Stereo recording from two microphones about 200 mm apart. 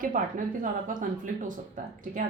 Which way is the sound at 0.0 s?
40° right (ahead or behind).